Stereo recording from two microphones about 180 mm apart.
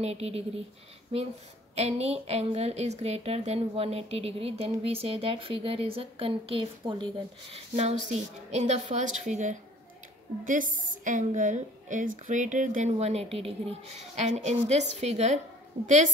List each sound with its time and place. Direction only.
0.0 s a woman's voice: 35° right (ahead or behind)